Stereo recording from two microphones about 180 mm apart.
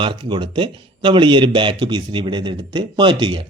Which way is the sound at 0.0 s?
25° right (ahead or behind).